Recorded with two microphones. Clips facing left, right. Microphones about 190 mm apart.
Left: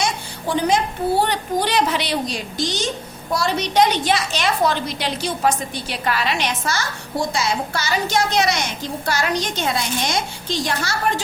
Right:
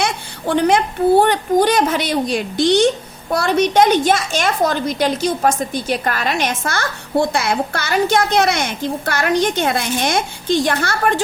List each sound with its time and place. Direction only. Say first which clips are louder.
0.0 s a woman's voice: right 3 dB; 60° right (ahead or behind)